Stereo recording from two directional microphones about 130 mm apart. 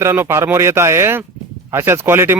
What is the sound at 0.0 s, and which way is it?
Speech, 20° right (ahead or behind).